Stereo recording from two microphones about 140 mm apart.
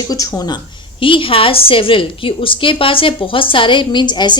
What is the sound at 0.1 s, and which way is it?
A woman's voice, 25° left (ahead or behind).